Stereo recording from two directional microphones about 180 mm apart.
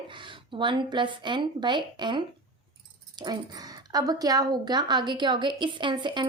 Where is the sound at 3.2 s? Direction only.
20° right (ahead or behind).